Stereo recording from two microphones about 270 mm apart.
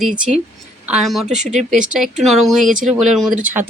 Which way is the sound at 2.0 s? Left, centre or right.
Centre.